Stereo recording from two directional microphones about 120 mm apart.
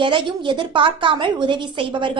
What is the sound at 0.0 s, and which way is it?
A woman's voice, 45° right (ahead or behind).